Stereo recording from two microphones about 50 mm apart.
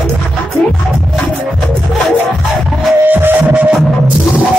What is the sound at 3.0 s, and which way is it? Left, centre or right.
Music, right.